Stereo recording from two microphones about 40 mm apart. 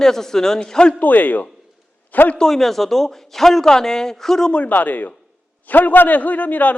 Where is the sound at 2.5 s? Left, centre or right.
Centre.